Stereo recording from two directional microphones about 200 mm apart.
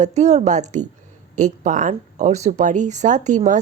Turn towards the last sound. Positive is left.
turn(degrees=-35)  # may be behind; listen again after turning